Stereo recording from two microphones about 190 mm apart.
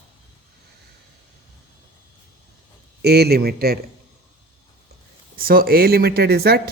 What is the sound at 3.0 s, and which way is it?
Speech, 55° right (ahead or behind).